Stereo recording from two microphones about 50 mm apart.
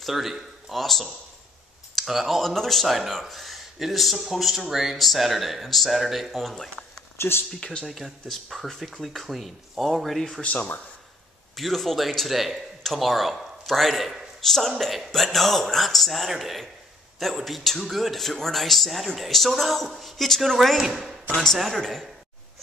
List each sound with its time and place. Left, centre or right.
0.0 s a man's voice: centre
2.4 s speech: centre
7.2 s speech: left
7.8 s speech: centre
10.4 s speech: left
11.5 s speech: centre